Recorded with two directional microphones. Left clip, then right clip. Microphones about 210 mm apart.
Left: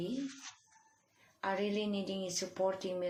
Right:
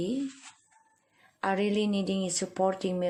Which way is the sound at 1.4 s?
45° right (ahead or behind).